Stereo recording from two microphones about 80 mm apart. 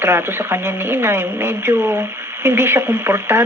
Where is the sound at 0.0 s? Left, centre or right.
Right.